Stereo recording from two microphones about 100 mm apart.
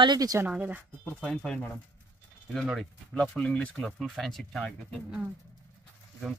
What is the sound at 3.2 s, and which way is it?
Speech, 10° left (ahead or behind).